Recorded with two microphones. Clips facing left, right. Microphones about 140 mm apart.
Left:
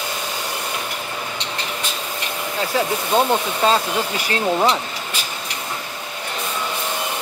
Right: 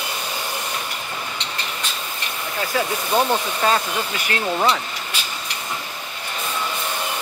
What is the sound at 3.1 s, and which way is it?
Speech, 25° left (ahead or behind).